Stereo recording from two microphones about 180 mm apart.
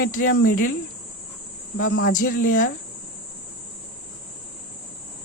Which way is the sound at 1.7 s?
55° left (ahead or behind).